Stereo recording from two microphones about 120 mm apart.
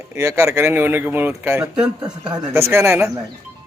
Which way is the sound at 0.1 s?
20° right (ahead or behind).